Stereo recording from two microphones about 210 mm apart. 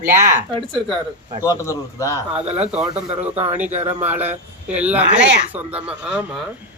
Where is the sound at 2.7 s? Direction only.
5° right (ahead or behind).